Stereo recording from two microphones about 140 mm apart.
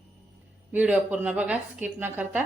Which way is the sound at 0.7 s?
10° right (ahead or behind).